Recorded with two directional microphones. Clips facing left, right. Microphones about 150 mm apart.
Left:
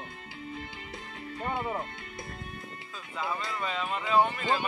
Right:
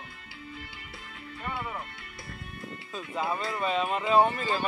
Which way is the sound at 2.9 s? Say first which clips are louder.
Right 4 dB; 25° right (ahead or behind).